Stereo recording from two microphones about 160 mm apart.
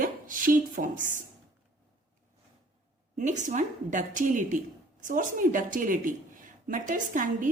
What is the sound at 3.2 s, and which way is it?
A woman's voice, 50° right (ahead or behind).